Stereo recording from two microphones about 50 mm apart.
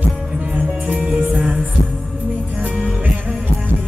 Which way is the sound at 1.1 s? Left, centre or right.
Right.